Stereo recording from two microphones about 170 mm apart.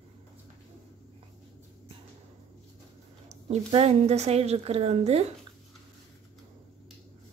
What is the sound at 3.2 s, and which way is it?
A woman's voice, 40° right (ahead or behind).